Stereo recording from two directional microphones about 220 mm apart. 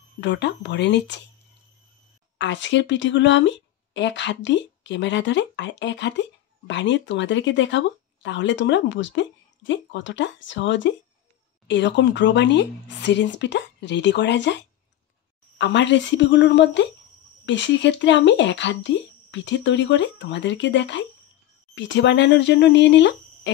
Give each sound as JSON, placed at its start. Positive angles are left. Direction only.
{"t": 0.2, "sound": "speech", "side_deg": 50}
{"t": 2.3, "sound": "speech", "side_deg": 55}